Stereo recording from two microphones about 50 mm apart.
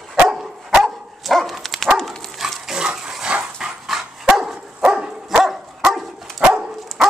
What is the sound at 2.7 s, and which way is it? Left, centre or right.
Dog, centre.